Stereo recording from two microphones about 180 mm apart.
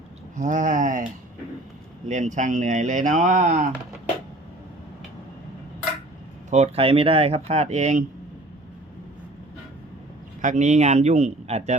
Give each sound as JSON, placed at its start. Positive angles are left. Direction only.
{"t": 0.3, "sound": "speech", "side_deg": -45}
{"t": 2.0, "sound": "speech", "side_deg": -40}
{"t": 6.5, "sound": "speech", "side_deg": -35}
{"t": 10.4, "sound": "speech", "side_deg": -40}